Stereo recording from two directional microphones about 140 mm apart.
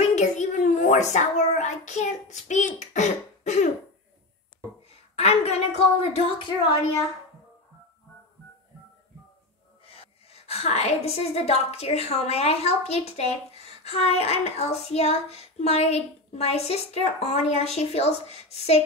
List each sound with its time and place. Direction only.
0.0 s child singing: 55° left (ahead or behind)
5.1 s a woman's voice: 50° left (ahead or behind)
9.8 s a woman's voice: 45° left (ahead or behind)